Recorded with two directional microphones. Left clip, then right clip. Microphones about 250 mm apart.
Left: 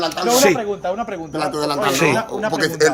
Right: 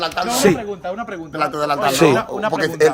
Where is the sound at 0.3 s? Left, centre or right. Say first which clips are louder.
Left 3 dB; centre.